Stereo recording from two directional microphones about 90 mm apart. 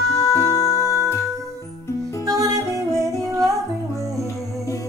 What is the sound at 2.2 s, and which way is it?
Music, 40° right (ahead or behind).